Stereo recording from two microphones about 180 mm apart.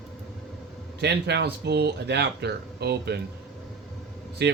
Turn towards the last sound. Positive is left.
turn(degrees=-65)  # may be behind; listen again after turning